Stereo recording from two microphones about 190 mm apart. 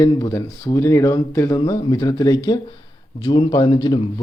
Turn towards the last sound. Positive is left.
turn(degrees=25)  # may be behind; listen again after turning